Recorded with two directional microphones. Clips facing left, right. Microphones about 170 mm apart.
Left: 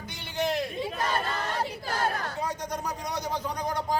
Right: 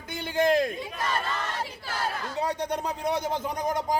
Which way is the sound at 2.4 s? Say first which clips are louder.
Right 7 dB; 35° right (ahead or behind).